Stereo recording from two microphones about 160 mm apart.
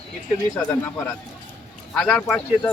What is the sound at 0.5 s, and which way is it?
Speech, 10° left (ahead or behind).